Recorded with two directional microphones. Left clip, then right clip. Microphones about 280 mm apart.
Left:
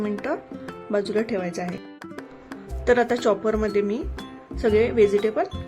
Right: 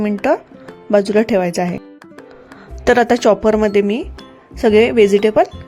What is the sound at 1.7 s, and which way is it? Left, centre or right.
Music, centre.